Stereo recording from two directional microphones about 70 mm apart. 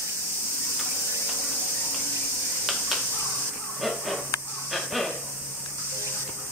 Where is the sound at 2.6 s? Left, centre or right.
Centre.